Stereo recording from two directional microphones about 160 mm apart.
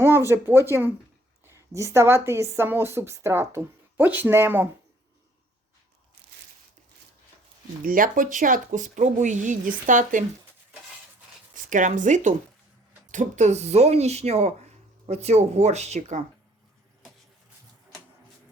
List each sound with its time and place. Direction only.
0.0 s a woman's voice: 15° right (ahead or behind)
7.9 s speech: 60° right (ahead or behind)
11.5 s speech: 55° right (ahead or behind)